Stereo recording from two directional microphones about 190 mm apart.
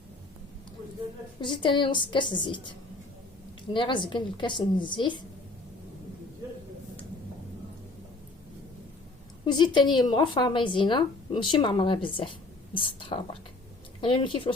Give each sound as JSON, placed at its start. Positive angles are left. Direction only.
{"t": 1.4, "sound": "a woman's voice", "side_deg": 25}
{"t": 9.5, "sound": "a woman's voice", "side_deg": 25}